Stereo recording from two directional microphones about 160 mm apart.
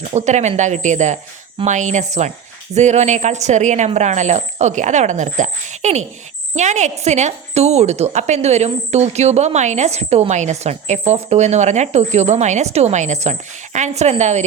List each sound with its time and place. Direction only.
0.1 s a woman's voice: 45° right (ahead or behind)